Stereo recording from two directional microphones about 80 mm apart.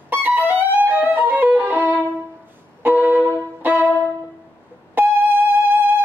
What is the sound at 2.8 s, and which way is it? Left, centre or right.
Music, right.